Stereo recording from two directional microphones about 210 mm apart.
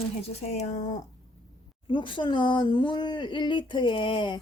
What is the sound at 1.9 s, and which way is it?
Speech, 25° left (ahead or behind).